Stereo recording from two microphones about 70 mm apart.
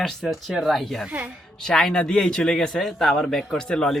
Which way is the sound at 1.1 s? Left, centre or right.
Right.